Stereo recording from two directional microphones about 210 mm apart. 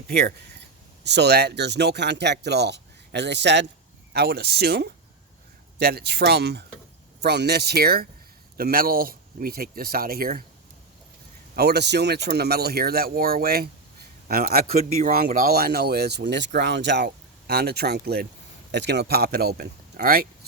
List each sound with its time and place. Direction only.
0.1 s speech: 50° right (ahead or behind)
11.5 s speech: 50° right (ahead or behind)